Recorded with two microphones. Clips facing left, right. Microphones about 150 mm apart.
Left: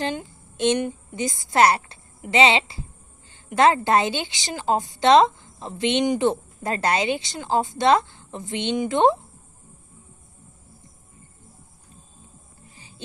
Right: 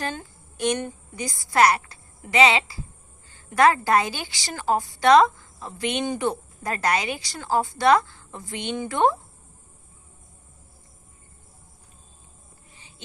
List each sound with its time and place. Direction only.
0.0 s a woman's voice: 20° left (ahead or behind)